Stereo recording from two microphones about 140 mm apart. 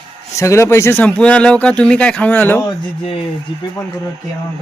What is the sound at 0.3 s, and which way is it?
Speech, 20° left (ahead or behind).